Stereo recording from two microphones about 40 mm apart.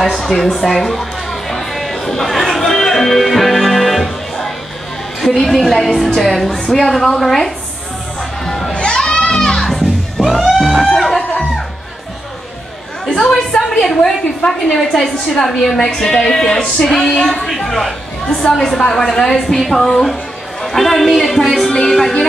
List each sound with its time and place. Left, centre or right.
0.0 s speech: centre
0.6 s a sound: centre
5.4 s a woman's voice: centre
8.5 s a sound: centre
8.7 s crowd: left
9.0 s music: centre
13.6 s a woman's voice: centre